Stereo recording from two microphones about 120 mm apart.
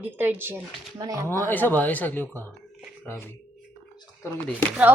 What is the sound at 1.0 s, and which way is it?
Speech, 30° right (ahead or behind).